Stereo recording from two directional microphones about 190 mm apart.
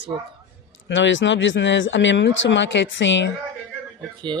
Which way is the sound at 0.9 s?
85° left.